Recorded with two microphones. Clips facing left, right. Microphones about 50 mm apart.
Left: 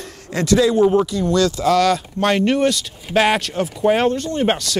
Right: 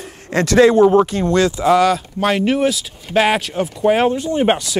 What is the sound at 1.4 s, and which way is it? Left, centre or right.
Speech, right.